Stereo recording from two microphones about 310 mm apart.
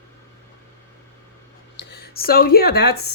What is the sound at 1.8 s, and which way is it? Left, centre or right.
Speech, left.